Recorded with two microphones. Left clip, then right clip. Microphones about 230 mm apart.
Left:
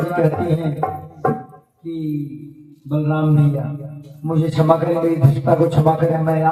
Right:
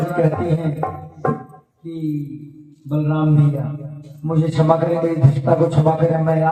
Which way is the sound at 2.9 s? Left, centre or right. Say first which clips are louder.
Even; left.